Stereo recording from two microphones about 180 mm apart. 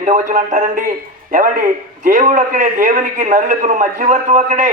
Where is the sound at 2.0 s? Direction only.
45° right (ahead or behind).